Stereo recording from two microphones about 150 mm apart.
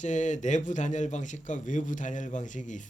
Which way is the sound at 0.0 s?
55° left (ahead or behind).